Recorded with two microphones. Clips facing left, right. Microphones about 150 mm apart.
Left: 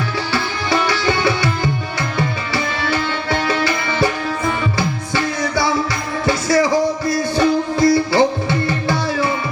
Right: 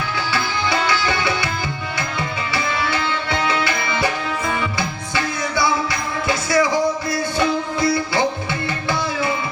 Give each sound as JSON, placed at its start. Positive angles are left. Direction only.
{"t": 0.7, "sound": "music", "side_deg": 35}
{"t": 5.1, "sound": "music", "side_deg": 35}